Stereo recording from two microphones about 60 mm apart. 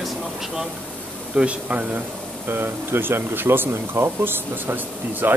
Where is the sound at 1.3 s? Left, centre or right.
Right.